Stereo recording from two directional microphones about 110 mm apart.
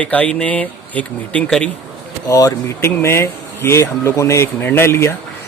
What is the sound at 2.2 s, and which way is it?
Speech, 30° left (ahead or behind).